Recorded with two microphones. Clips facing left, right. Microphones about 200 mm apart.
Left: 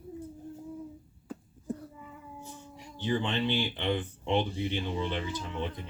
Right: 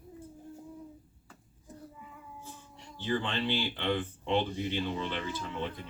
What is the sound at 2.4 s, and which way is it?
Speech, 15° left (ahead or behind).